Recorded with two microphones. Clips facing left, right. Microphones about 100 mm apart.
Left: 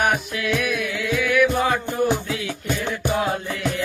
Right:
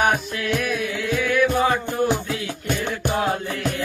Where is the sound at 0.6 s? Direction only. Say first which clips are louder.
Even; 30° right (ahead or behind).